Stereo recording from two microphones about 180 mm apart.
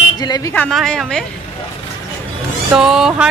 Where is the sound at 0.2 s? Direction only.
20° left (ahead or behind).